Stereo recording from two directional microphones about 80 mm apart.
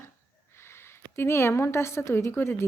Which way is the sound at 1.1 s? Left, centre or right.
Left.